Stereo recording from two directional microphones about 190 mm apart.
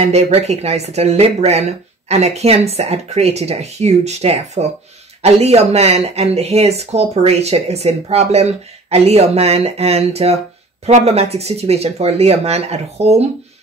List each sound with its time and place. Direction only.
0.0 s speech: 35° right (ahead or behind)